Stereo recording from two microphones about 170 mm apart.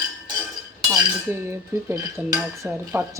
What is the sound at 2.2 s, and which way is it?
Speech, 10° right (ahead or behind).